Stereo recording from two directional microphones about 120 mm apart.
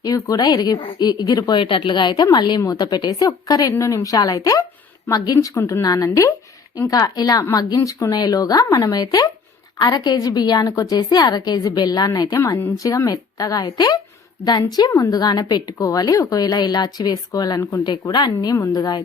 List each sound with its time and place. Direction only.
0.0 s a woman's voice: 30° left (ahead or behind)